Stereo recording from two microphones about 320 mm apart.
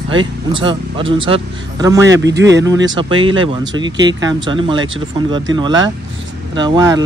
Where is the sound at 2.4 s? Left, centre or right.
Right.